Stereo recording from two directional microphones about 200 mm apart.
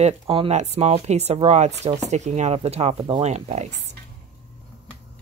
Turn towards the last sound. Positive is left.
turn(degrees=-35)  # may be behind; listen again after turning